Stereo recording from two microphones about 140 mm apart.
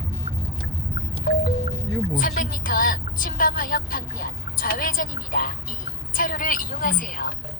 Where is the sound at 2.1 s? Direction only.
75° left (ahead or behind).